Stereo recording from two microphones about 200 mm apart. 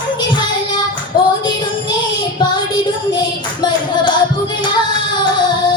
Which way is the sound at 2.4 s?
20° left (ahead or behind).